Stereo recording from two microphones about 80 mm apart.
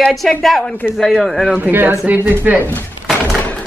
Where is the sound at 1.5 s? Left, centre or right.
Right.